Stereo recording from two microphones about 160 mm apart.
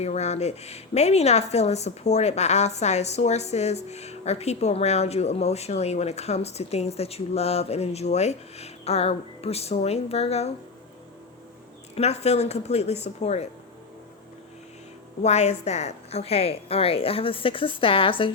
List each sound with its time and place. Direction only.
0.0 s a woman's voice: 45° left (ahead or behind)
11.9 s a woman's voice: 40° left (ahead or behind)
15.2 s a woman's voice: 45° left (ahead or behind)